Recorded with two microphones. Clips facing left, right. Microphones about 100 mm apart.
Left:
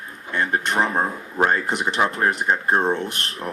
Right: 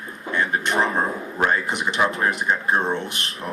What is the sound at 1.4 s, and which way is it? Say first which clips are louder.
A man's voice: left 2 dB; 40° left (ahead or behind).